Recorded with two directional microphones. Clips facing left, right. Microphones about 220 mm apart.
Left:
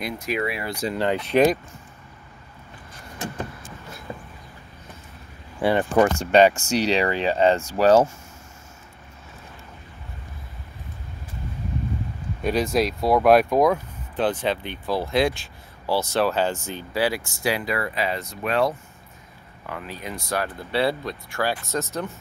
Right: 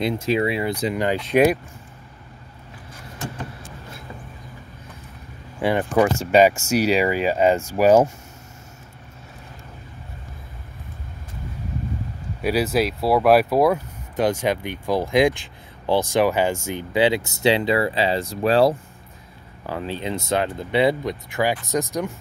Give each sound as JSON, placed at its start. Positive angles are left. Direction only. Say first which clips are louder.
{"t": 0.0, "sound": "speech", "louder": "right 6 dB", "side_deg": -25}
{"t": 5.6, "sound": "speech", "louder": "even", "side_deg": -15}
{"t": 12.4, "sound": "speech", "louder": "right 1 dB", "side_deg": -5}